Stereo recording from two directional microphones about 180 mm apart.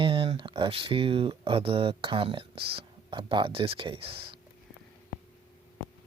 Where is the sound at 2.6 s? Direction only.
60° right (ahead or behind).